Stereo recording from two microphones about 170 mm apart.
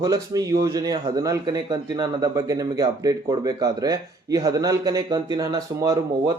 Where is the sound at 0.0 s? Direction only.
20° right (ahead or behind).